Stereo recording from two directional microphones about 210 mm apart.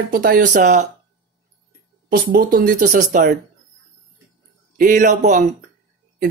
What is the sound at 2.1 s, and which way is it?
Speech, 40° right (ahead or behind).